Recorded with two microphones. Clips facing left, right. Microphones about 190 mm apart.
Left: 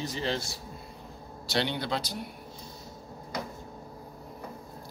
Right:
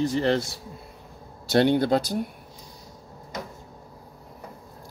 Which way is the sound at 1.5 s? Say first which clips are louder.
Right 10 dB; 50° right (ahead or behind).